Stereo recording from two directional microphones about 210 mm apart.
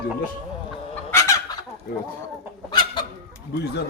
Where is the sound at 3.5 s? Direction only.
55° left (ahead or behind).